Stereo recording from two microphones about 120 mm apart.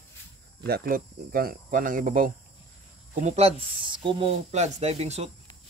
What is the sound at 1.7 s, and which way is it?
Speech, 90° right.